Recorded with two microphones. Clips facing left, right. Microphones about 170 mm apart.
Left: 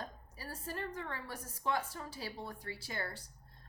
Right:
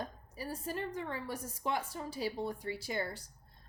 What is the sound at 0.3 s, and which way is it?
A woman's voice, 15° right (ahead or behind).